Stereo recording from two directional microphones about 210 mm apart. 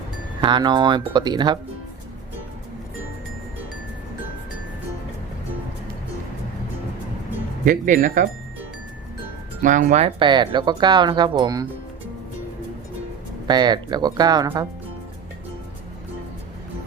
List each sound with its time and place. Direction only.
0.4 s speech: 20° right (ahead or behind)
7.6 s speech: 40° right (ahead or behind)
9.6 s speech: 35° right (ahead or behind); by 11.6 s 20° right (ahead or behind)
13.5 s speech: 20° right (ahead or behind)